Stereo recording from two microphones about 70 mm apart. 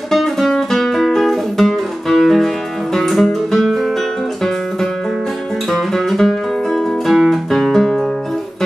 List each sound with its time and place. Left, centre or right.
0.1 s music: centre
5.7 s music: centre